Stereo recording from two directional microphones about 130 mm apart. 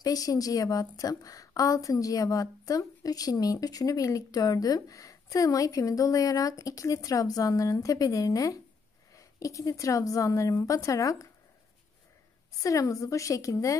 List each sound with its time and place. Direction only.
0.0 s a woman's voice: 30° left (ahead or behind)
12.6 s a woman's voice: 25° left (ahead or behind)